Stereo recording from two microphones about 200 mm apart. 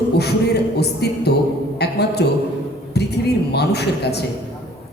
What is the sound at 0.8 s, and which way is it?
Speech, 55° left (ahead or behind).